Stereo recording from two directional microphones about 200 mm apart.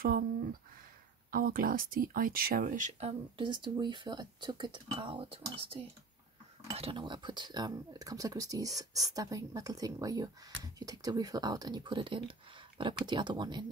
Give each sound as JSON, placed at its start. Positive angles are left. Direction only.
{"t": 0.0, "sound": "speech", "side_deg": -45}